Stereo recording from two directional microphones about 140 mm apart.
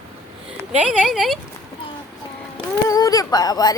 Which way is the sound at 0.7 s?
5° right (ahead or behind).